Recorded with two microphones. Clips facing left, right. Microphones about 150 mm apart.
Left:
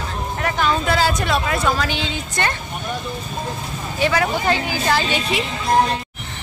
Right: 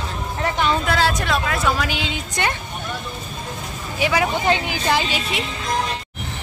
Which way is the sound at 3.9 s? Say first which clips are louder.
Left 1 dB; 10° right (ahead or behind).